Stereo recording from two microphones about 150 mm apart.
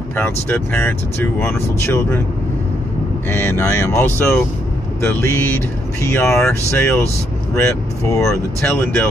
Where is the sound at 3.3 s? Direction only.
15° left (ahead or behind).